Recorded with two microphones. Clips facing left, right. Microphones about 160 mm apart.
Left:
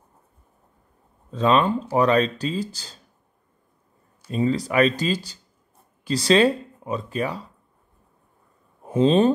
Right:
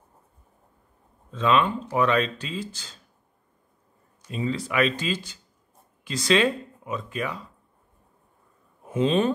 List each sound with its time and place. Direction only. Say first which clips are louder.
1.3 s speech: left 3 dB; 35° left (ahead or behind)
4.3 s speech: left 6 dB; 40° left (ahead or behind)
8.8 s speech: left 5 dB; 35° left (ahead or behind)